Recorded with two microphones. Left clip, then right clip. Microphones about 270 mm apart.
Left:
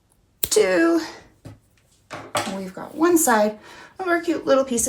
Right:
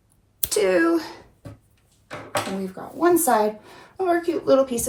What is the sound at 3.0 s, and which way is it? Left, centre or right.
Speech, left.